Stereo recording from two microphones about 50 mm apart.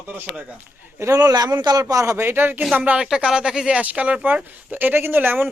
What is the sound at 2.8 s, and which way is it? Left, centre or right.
Speech, right.